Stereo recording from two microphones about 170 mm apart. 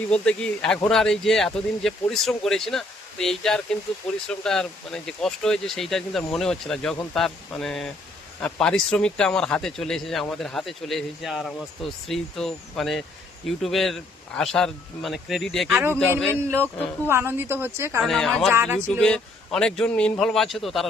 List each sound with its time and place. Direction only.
0.1 s speech: 5° left (ahead or behind)
15.7 s speech: 10° right (ahead or behind)
17.1 s speech: 15° right (ahead or behind)
18.0 s speech: 5° left (ahead or behind)
18.5 s speech: 15° right (ahead or behind)
18.9 s speech: 5° left (ahead or behind)